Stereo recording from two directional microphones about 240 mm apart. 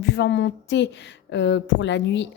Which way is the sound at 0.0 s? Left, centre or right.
Left.